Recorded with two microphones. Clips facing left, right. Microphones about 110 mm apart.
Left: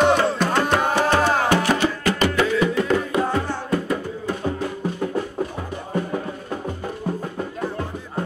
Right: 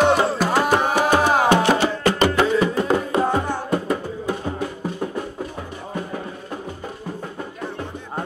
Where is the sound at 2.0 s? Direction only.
35° right (ahead or behind).